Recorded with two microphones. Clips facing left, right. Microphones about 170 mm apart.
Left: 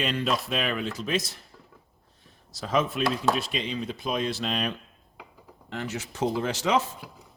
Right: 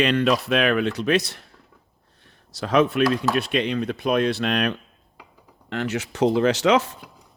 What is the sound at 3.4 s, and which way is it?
Speech, 65° right (ahead or behind).